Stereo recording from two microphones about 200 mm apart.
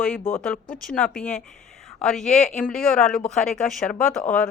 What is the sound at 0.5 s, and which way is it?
Speech, 45° left (ahead or behind).